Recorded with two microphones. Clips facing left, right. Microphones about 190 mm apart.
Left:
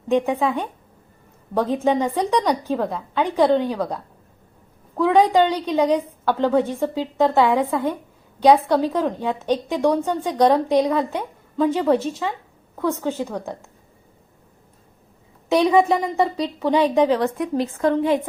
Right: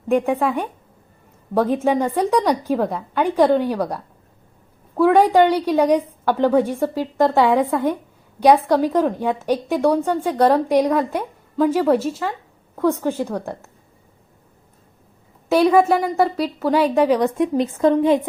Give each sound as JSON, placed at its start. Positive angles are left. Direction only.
{"t": 0.1, "sound": "a woman's voice", "side_deg": -10}
{"t": 15.4, "sound": "a woman's voice", "side_deg": -5}
{"t": 17.0, "sound": "a woman's voice", "side_deg": -15}